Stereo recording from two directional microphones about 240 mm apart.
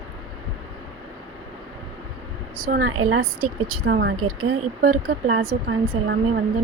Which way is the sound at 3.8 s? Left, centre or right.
Right.